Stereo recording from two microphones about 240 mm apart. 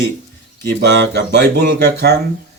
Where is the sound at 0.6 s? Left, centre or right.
Right.